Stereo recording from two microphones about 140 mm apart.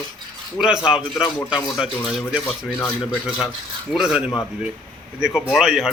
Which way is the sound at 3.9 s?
5° right (ahead or behind).